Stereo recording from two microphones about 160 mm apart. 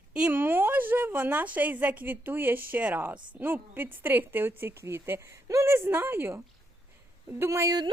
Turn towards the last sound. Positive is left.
turn(degrees=-20)  # may be behind; listen again after turning